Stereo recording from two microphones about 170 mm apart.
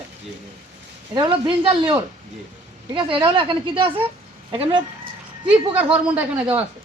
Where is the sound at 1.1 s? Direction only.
30° right (ahead or behind).